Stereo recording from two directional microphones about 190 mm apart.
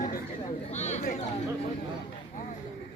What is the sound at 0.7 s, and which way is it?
Chatter, 35° left (ahead or behind).